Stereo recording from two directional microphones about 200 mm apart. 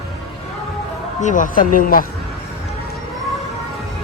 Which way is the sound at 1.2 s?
40° left (ahead or behind).